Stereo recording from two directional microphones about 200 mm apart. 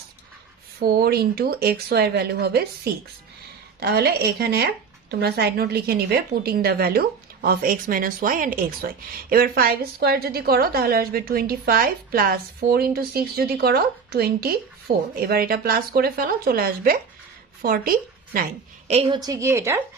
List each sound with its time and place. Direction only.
0.8 s a woman's voice: 50° right (ahead or behind)
18.9 s a woman's voice: 30° right (ahead or behind)